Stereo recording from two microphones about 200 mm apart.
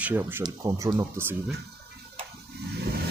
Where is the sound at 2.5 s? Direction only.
55° right (ahead or behind).